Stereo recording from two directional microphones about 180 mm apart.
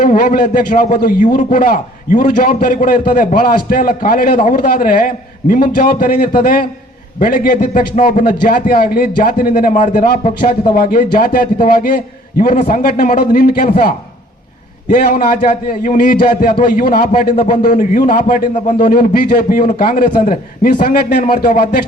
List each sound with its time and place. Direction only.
0.0 s a man's voice: 50° left (ahead or behind)
14.8 s a man's voice: 45° left (ahead or behind)